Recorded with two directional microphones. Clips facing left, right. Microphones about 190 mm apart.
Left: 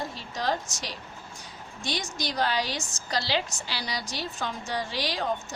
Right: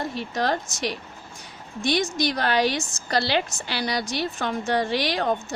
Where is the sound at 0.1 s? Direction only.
65° right (ahead or behind).